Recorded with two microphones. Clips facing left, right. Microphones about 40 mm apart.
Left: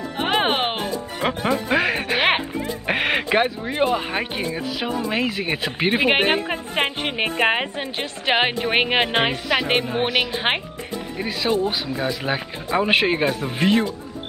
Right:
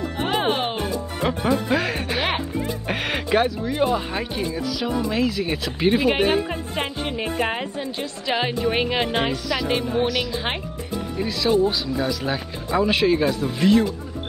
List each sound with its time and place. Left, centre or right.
0.2 s music: left
1.2 s speech: left
2.1 s music: left
2.9 s a woman's voice: left
11.7 s speech: left